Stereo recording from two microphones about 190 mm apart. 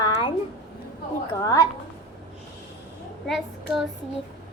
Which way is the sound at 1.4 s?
20° left (ahead or behind).